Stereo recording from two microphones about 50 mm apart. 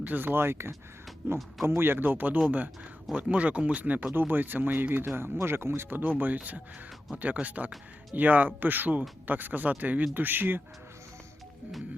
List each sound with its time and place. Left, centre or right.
0.0 s speech: right
3.2 s speech: right
4.1 s speech: right
6.0 s speech: right